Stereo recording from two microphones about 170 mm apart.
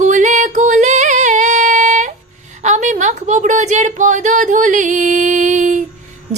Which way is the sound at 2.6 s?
45° right (ahead or behind).